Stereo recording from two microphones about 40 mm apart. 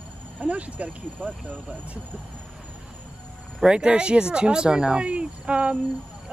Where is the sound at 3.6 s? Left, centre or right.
Right.